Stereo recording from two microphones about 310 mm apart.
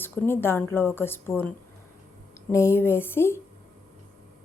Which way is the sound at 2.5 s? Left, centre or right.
Centre.